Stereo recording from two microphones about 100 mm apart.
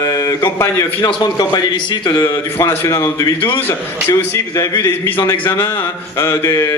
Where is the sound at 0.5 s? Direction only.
25° left (ahead or behind).